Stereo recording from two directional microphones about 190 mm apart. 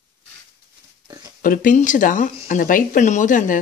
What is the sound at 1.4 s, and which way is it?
Speech, 45° left (ahead or behind).